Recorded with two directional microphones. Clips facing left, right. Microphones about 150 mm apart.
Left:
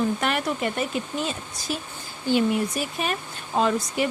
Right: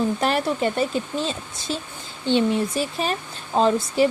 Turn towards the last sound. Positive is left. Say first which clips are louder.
# right 5 dB
turn(degrees=-30)  # may be behind; listen again after turning